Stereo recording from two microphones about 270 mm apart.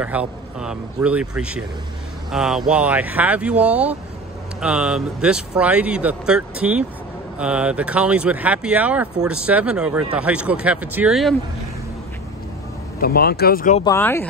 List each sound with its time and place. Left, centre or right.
0.0 s speech: centre
13.0 s speech: left
13.8 s speech: centre